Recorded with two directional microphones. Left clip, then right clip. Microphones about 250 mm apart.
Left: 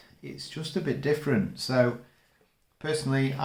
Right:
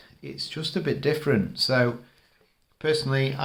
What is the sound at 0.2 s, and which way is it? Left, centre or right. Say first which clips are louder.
Speech: right 6 dB; right.